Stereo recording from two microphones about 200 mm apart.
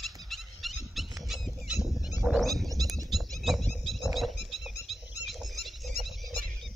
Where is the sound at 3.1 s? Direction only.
Centre (ahead or behind).